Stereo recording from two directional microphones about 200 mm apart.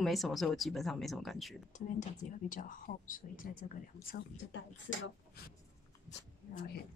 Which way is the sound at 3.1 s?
45° left (ahead or behind).